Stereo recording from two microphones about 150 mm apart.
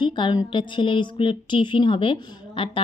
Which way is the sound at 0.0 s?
30° left (ahead or behind).